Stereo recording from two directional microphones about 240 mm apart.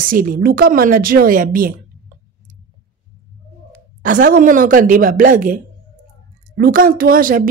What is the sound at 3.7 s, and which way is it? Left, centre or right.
A woman's voice, right.